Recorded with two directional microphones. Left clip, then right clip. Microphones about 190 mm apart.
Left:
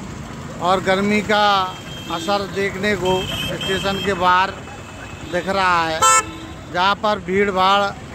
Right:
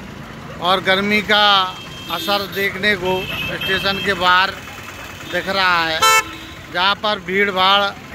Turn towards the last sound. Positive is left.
turn(degrees=10)  # may be behind; listen again after turning